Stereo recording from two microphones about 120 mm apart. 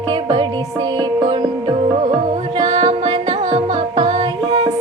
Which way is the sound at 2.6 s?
35° right (ahead or behind).